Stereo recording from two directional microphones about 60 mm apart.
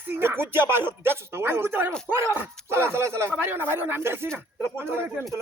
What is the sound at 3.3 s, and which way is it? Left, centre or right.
Speech, right.